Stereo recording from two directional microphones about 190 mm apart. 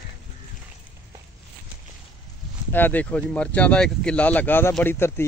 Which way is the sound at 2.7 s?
10° left (ahead or behind).